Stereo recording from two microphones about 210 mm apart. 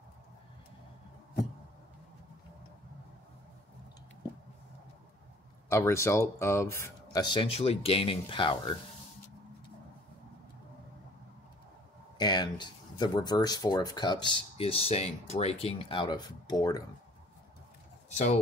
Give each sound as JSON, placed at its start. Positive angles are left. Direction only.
{"t": 5.7, "sound": "speech", "side_deg": 15}
{"t": 12.2, "sound": "speech", "side_deg": 20}
{"t": 18.1, "sound": "speech", "side_deg": 35}